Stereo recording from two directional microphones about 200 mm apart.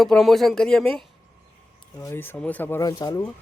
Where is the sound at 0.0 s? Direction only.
Centre (ahead or behind); by 3.2 s 20° left (ahead or behind).